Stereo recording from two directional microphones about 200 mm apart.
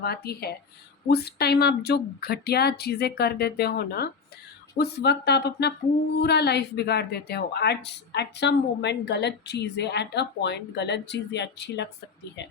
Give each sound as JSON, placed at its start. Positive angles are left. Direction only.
{"t": 0.0, "sound": "speech", "side_deg": 50}